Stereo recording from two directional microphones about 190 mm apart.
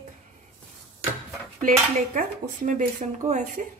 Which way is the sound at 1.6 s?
45° right (ahead or behind).